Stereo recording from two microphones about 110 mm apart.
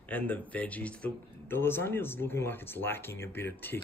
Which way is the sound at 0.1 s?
15° left (ahead or behind).